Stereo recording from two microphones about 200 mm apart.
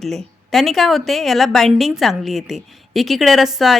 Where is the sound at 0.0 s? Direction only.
Centre (ahead or behind).